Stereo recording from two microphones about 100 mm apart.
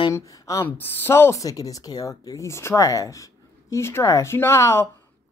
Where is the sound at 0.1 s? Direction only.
35° left (ahead or behind).